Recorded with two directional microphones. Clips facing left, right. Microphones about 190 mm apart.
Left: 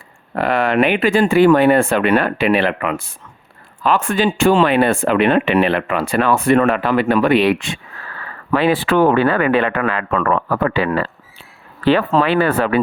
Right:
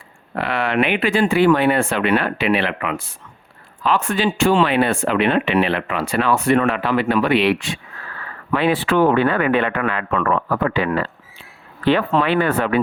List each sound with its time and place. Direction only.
0.3 s speech: 45° left (ahead or behind)
9.6 s speech: 90° left
10.0 s speech: 50° left (ahead or behind)
11.9 s speech: 40° left (ahead or behind)
12.4 s speech: 90° left